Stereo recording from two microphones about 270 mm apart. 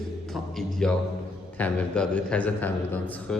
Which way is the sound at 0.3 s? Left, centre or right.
Centre.